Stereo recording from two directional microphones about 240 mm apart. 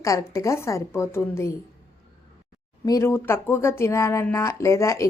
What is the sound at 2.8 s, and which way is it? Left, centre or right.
Speech, centre.